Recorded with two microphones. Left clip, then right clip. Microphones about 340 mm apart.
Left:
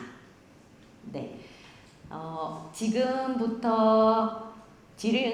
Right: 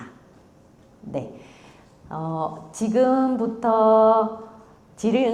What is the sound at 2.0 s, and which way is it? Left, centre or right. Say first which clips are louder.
A woman's voice: right 7 dB; right.